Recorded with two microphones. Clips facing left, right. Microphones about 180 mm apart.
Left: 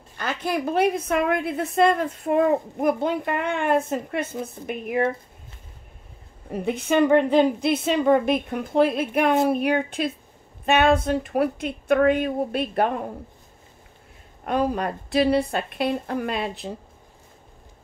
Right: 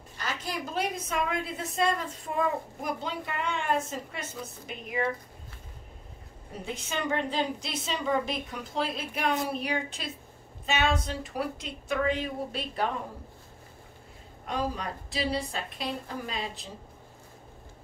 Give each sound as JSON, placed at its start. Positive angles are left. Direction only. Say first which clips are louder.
{"t": 0.2, "sound": "a woman's voice", "louder": "left 9 dB", "side_deg": 55}
{"t": 6.5, "sound": "a woman's voice", "louder": "left 13 dB", "side_deg": 60}
{"t": 14.4, "sound": "a woman's voice", "louder": "left 9 dB", "side_deg": 60}